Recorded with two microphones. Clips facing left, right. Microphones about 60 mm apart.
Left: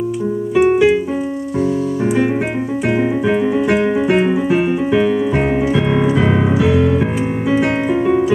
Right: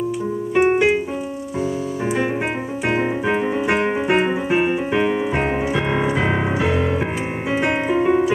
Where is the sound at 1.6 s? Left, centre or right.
Centre.